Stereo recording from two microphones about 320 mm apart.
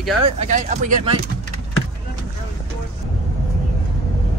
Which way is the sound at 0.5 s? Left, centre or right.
Right.